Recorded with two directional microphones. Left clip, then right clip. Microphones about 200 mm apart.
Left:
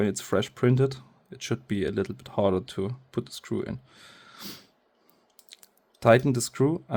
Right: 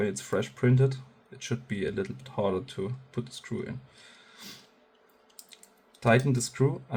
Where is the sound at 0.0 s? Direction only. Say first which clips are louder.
Left 3 dB; 60° left (ahead or behind).